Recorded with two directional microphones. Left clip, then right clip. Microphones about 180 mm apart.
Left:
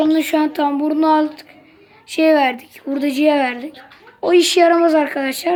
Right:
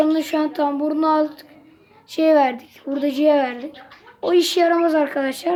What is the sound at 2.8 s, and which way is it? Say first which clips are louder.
Speech: left 1 dB; centre (ahead or behind).